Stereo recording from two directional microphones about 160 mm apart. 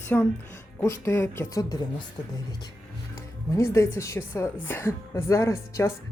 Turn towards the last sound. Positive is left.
turn(degrees=20)  # may be behind; listen again after turning